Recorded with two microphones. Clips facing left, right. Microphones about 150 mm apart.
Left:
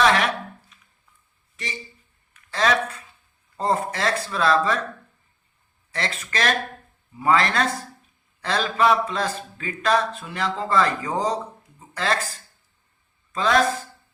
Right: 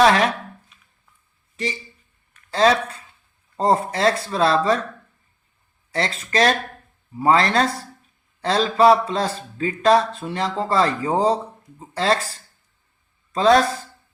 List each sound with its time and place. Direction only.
0.0 s a sound: 35° right (ahead or behind)
2.5 s speech: 30° right (ahead or behind)
5.9 s speech: 30° right (ahead or behind)